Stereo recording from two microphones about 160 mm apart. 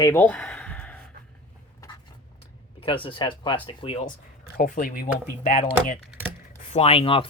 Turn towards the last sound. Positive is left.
turn(degrees=35)  # may be behind; listen again after turning